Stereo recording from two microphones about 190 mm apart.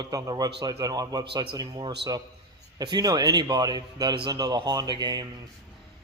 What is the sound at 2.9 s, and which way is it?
Speech, 20° right (ahead or behind).